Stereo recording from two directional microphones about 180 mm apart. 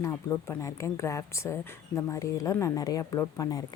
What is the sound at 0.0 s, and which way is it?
A woman's voice, 10° left (ahead or behind).